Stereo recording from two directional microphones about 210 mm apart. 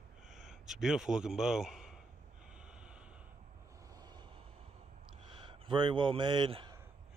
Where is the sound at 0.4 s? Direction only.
Centre (ahead or behind).